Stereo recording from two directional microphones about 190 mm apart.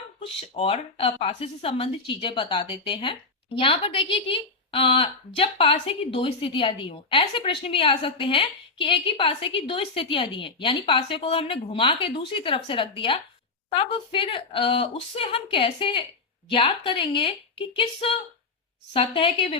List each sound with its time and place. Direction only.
0.2 s speech: 30° left (ahead or behind)